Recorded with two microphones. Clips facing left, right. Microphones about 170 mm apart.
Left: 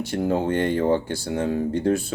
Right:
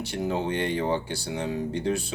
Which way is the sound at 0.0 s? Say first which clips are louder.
Left 5 dB; 50° left (ahead or behind).